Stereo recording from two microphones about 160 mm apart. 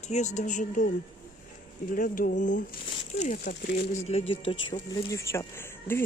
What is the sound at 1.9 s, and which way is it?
Speech, 60° left (ahead or behind).